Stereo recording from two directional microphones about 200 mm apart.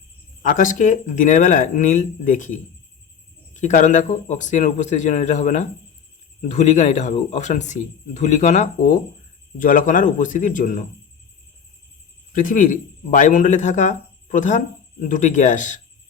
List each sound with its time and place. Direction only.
0.4 s speech: 40° left (ahead or behind)
12.3 s speech: 40° left (ahead or behind)